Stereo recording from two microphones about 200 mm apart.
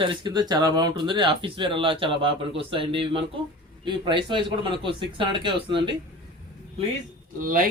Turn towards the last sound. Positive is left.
turn(degrees=-45)  # may be behind; listen again after turning